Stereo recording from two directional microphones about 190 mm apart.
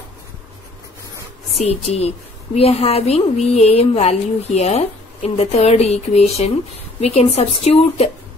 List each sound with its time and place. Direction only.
1.6 s a woman's voice: 35° left (ahead or behind)